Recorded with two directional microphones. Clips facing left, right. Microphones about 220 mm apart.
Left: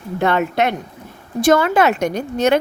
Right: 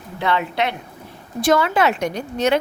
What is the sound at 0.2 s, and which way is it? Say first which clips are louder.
A woman's voice: left 4 dB; 45° left (ahead or behind).